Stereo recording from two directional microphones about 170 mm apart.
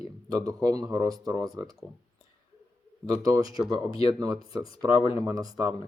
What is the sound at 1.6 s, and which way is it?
Speech, centre (ahead or behind).